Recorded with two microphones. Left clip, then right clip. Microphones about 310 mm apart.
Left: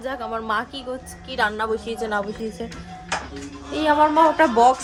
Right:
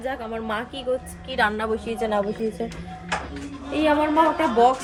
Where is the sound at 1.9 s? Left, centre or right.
Centre.